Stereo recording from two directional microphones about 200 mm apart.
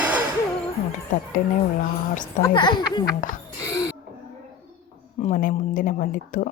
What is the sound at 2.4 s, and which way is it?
Speech, 20° left (ahead or behind).